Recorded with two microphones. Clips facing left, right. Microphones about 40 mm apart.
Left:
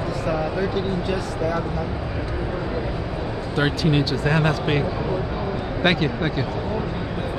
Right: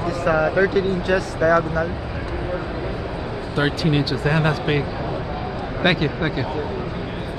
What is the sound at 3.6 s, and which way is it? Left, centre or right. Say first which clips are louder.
Speech: right 1 dB; centre.